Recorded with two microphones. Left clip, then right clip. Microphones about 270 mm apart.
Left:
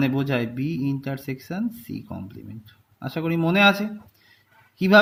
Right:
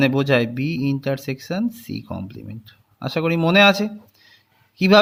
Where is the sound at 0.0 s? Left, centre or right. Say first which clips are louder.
Right 7 dB; right.